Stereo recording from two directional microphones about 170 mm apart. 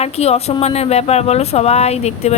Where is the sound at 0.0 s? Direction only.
40° left (ahead or behind).